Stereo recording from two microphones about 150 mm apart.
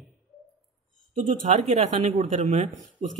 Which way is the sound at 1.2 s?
55° right (ahead or behind).